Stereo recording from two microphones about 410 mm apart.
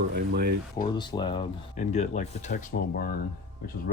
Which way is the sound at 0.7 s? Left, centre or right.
Centre.